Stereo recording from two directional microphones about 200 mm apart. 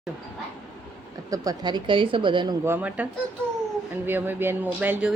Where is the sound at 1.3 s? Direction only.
20° right (ahead or behind).